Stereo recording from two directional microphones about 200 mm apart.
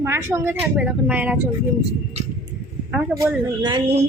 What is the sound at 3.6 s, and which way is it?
Speech, 20° right (ahead or behind).